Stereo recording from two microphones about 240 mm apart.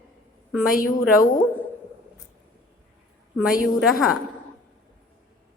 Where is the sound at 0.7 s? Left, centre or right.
Left.